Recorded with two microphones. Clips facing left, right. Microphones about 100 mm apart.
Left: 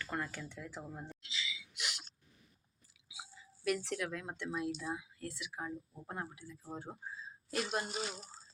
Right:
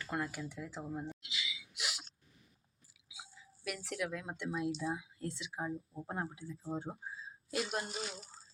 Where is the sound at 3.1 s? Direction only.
Centre (ahead or behind); by 6.6 s 25° right (ahead or behind).